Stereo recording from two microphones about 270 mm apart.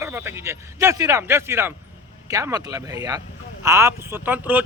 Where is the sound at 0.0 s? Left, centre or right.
Centre.